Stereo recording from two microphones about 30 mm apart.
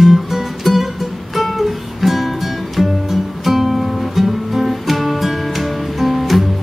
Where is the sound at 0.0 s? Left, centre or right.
Centre.